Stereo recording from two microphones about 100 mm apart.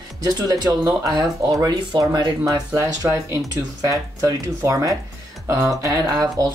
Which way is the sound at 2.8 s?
30° right (ahead or behind).